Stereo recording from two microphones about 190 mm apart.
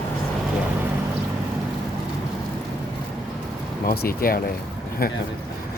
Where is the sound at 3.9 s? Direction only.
50° left (ahead or behind).